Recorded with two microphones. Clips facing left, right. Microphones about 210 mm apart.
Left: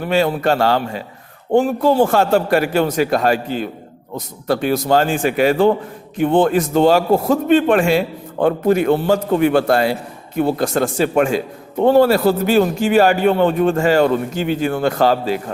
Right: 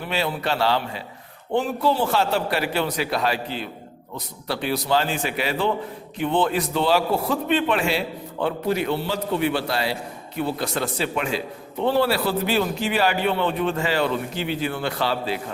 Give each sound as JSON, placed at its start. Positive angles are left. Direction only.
{"t": 0.0, "sound": "a man's voice", "side_deg": 45}